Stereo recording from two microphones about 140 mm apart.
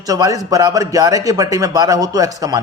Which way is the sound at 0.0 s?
25° right (ahead or behind).